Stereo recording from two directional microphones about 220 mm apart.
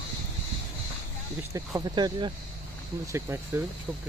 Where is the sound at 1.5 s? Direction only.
15° right (ahead or behind).